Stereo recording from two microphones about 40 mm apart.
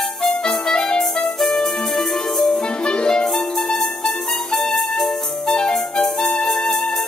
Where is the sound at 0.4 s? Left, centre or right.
Centre.